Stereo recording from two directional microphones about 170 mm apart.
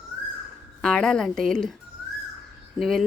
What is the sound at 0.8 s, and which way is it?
Speech, 5° left (ahead or behind).